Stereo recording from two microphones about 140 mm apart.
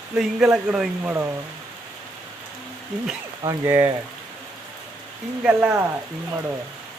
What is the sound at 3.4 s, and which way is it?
Speech, 20° right (ahead or behind).